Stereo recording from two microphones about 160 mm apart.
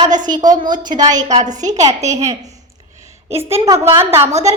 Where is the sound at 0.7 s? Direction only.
30° right (ahead or behind).